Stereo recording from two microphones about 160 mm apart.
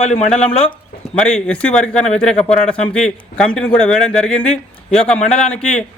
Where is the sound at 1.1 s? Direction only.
5° left (ahead or behind).